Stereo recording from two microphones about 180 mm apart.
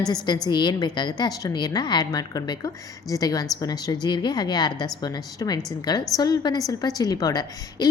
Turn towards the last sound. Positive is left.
turn(degrees=20)  # may be behind; listen again after turning